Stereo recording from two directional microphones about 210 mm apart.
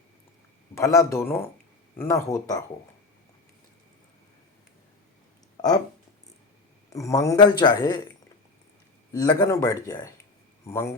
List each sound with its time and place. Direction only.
0.8 s speech: 15° left (ahead or behind)
6.9 s speech: 15° left (ahead or behind)
9.1 s speech: 15° left (ahead or behind)